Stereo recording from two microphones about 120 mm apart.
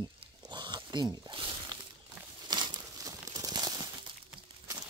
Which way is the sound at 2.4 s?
35° right (ahead or behind).